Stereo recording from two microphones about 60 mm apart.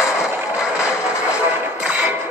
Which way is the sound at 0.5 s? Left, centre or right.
Centre.